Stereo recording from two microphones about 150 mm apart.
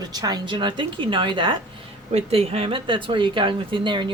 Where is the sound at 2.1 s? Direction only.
40° right (ahead or behind).